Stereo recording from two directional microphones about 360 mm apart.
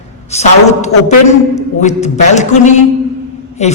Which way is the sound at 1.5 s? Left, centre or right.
Centre.